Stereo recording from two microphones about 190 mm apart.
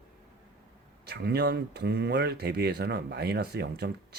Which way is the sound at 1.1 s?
60° right (ahead or behind).